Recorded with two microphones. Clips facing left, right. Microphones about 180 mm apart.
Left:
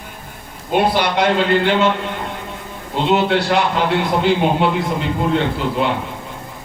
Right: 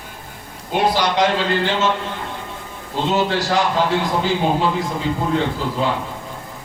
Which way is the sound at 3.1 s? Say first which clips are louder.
Left 1 dB; 65° left (ahead or behind).